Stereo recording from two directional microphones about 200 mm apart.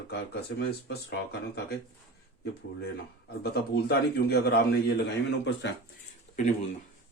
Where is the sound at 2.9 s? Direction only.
55° left (ahead or behind).